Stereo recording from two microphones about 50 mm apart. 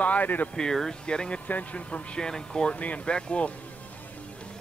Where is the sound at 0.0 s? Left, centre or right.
Left.